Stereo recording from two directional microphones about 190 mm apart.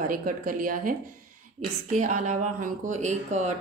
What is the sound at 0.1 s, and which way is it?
A woman's voice, 45° right (ahead or behind).